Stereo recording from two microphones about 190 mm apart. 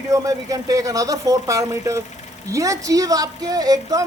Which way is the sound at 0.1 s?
20° right (ahead or behind).